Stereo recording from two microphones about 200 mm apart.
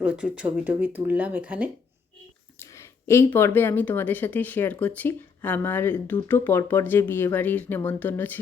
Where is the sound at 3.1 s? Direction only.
10° left (ahead or behind).